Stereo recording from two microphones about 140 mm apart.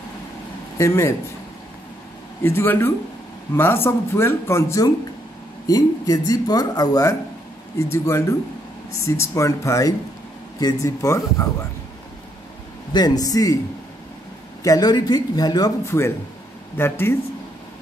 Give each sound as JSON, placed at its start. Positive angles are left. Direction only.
{"t": 0.7, "sound": "speech", "side_deg": 20}
{"t": 2.4, "sound": "speech", "side_deg": 15}
{"t": 12.9, "sound": "speech", "side_deg": 30}
{"t": 14.6, "sound": "speech", "side_deg": 25}